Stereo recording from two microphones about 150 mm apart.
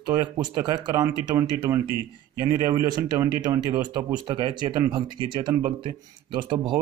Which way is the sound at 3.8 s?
30° right (ahead or behind).